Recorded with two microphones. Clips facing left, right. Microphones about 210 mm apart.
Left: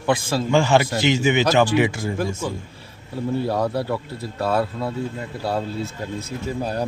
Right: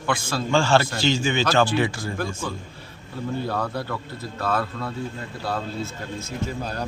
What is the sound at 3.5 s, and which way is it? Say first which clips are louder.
A man's voice: left 5 dB; 30° left (ahead or behind).